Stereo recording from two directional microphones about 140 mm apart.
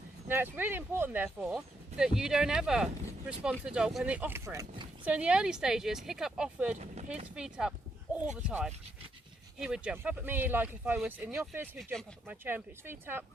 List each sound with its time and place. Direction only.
0.3 s speech: 15° right (ahead or behind)